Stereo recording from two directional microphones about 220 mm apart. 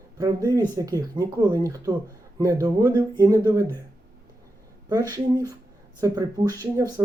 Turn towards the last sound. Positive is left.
turn(degrees=-15)  # may be behind; listen again after turning